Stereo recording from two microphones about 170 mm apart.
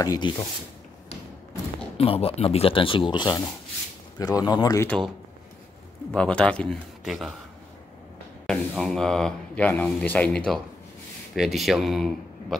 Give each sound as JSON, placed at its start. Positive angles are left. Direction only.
{"t": 0.0, "sound": "speech", "side_deg": 20}
{"t": 2.0, "sound": "speech", "side_deg": 35}
{"t": 4.8, "sound": "speech", "side_deg": 5}
{"t": 6.1, "sound": "a man's voice", "side_deg": 5}
{"t": 8.5, "sound": "speech", "side_deg": 0}